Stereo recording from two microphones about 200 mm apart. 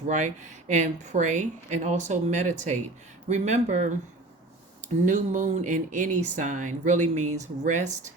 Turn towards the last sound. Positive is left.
turn(degrees=-35)  # may be behind; listen again after turning